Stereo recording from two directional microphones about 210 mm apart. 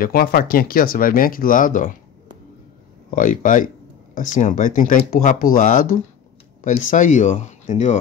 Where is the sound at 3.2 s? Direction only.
40° left (ahead or behind).